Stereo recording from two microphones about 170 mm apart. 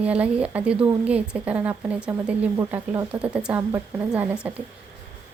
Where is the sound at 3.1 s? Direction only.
5° right (ahead or behind).